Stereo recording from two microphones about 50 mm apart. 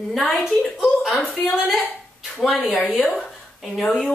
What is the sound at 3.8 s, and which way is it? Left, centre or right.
Speech, centre.